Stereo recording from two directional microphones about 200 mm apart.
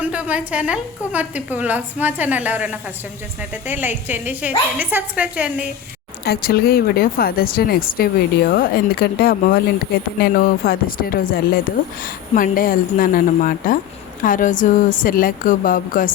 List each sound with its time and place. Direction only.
0.0 s a woman's voice: 5° right (ahead or behind)
6.2 s speech: 50° left (ahead or behind)